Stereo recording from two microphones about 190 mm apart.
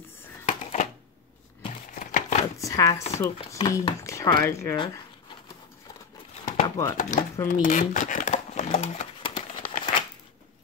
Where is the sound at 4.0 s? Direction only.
15° left (ahead or behind).